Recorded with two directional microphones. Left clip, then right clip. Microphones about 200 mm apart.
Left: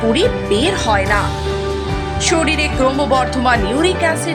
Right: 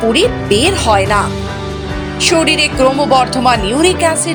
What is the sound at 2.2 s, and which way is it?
Speech, 20° right (ahead or behind).